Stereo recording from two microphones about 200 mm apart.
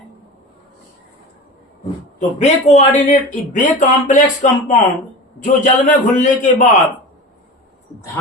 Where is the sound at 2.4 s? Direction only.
35° left (ahead or behind).